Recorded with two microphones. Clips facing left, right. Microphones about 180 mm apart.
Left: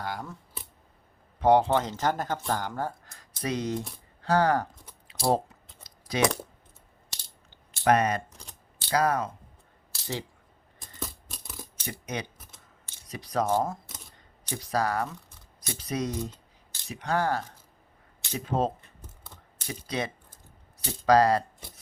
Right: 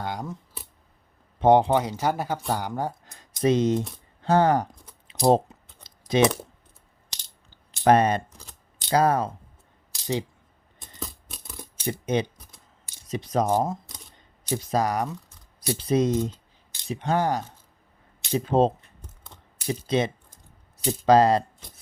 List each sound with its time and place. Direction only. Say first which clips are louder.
0.0 s a sound: right 4 dB; 20° right (ahead or behind)
1.4 s speech: right 3 dB; 20° right (ahead or behind)
5.0 s typing: right 6 dB; 20° right (ahead or behind)
7.5 s coin: right 5 dB; 30° right (ahead or behind)
8.3 s a sound: right 1 dB; centre (ahead or behind)
8.9 s speech: right 4 dB; 30° right (ahead or behind)
9.9 s coin: right 7 dB; 15° right (ahead or behind)
10.8 s coin: even; centre (ahead or behind)
11.9 s speech: right 10 dB; 25° right (ahead or behind)
18.3 s speech: right 7 dB; 30° right (ahead or behind)